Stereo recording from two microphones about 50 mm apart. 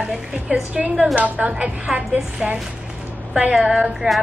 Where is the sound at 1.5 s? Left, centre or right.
Centre.